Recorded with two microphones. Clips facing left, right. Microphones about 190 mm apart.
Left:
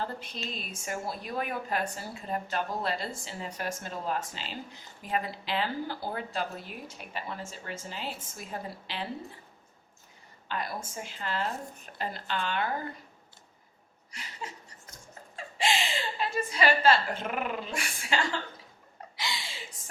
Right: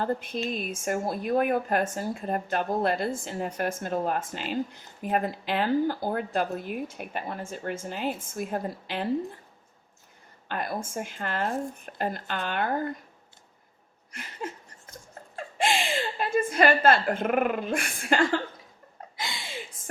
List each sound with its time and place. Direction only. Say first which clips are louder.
0.0 s a woman's voice: right 8 dB; 50° right (ahead or behind)
10.5 s a woman's voice: right 4 dB; 50° right (ahead or behind)
14.1 s a woman's voice: right 6 dB; 50° right (ahead or behind)
15.5 s a woman's voice: right 3 dB; 50° right (ahead or behind)
19.1 s a sound: right 1 dB; 50° right (ahead or behind)